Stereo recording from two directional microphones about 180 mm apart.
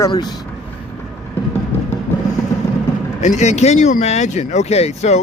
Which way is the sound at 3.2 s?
40° left (ahead or behind).